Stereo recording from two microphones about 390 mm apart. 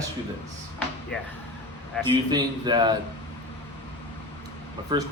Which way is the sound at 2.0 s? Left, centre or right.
Centre.